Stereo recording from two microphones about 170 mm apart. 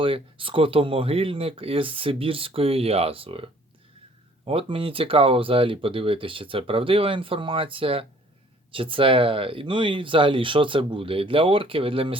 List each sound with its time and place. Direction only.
0.0 s speech: 30° right (ahead or behind)